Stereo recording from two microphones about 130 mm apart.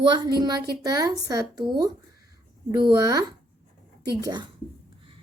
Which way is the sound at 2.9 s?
25° right (ahead or behind).